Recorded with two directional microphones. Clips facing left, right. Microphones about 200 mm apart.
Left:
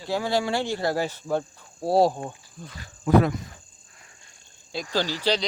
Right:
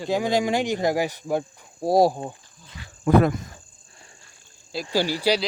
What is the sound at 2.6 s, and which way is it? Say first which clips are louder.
Speech: left 11 dB; 60° left (ahead or behind).